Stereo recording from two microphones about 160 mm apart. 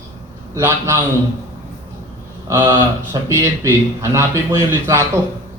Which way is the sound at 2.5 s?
15° right (ahead or behind).